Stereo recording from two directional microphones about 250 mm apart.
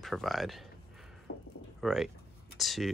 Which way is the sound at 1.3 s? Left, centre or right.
Left.